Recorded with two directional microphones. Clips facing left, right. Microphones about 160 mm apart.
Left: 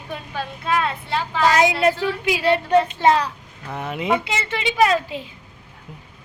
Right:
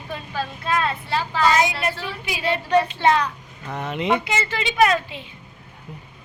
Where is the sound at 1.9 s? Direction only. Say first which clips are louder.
Left 8 dB; 90° left.